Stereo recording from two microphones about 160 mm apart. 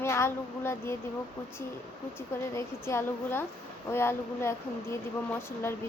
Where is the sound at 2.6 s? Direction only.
15° left (ahead or behind).